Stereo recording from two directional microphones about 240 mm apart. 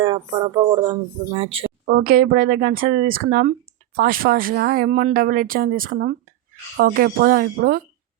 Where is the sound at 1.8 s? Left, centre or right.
Right.